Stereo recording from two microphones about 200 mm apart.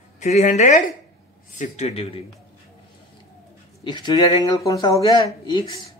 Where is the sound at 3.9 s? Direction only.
20° left (ahead or behind).